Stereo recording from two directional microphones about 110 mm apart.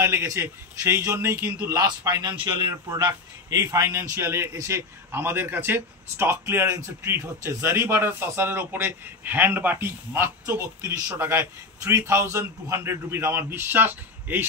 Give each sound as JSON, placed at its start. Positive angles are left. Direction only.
{"t": 0.0, "sound": "a man's voice", "side_deg": -25}
{"t": 1.7, "sound": "a man's voice", "side_deg": -35}
{"t": 3.1, "sound": "a man's voice", "side_deg": -30}